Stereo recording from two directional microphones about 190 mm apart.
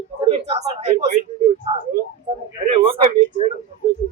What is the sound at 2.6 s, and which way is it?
Speech, 35° right (ahead or behind).